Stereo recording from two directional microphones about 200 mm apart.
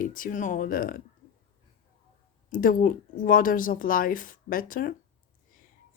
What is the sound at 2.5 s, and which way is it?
Speech, 45° left (ahead or behind).